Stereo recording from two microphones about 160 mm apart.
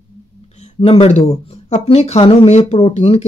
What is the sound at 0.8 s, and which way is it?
Speech, 35° left (ahead or behind).